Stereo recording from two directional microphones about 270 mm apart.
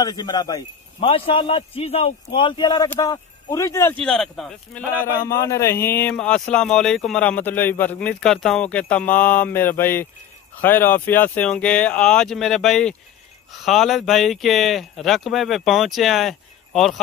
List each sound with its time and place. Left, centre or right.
0.0 s a man's voice: centre
5.2 s a man's voice: centre